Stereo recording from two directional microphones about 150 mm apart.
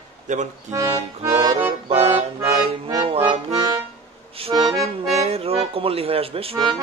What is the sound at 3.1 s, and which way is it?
Accordion, 40° right (ahead or behind).